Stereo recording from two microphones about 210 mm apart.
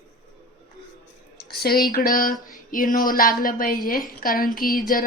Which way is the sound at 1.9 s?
40° left (ahead or behind).